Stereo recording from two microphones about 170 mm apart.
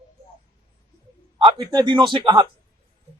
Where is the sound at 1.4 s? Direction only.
25° right (ahead or behind).